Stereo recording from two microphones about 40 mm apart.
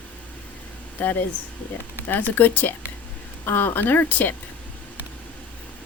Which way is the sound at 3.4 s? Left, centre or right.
Left.